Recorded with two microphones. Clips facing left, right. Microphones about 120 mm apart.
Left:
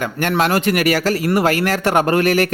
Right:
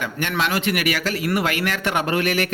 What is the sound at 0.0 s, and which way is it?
A man's voice, 45° left (ahead or behind).